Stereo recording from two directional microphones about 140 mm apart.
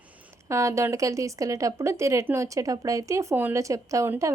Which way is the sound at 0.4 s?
20° right (ahead or behind).